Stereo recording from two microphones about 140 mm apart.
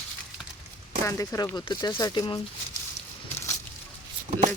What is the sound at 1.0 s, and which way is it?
Speech, 25° left (ahead or behind).